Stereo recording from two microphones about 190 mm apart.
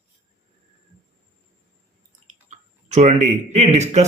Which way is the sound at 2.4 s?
35° right (ahead or behind).